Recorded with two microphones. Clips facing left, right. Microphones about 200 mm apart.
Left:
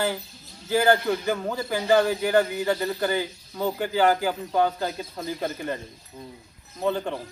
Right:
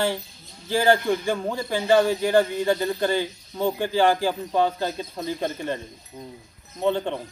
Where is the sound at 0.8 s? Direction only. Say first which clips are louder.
Right 3 dB; 30° right (ahead or behind).